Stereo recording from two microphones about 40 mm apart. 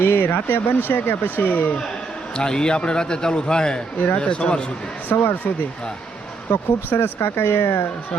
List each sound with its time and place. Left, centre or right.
0.0 s speech: left
2.3 s a man's voice: centre
5.0 s speech: left
6.5 s speech: left